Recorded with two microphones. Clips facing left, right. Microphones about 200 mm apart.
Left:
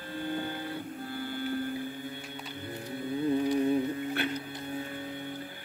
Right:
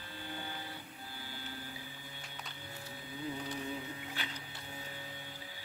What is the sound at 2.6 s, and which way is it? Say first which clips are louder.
Music: left 15 dB; 55° left (ahead or behind).